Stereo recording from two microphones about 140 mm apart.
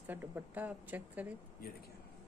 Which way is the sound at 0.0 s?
15° right (ahead or behind).